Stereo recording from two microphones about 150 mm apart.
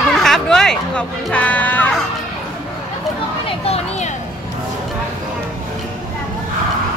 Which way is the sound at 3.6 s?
45° left (ahead or behind).